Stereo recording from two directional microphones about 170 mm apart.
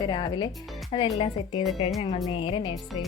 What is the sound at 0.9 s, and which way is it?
Music, 35° left (ahead or behind).